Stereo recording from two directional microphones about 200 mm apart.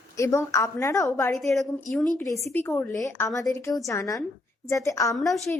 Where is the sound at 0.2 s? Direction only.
15° left (ahead or behind).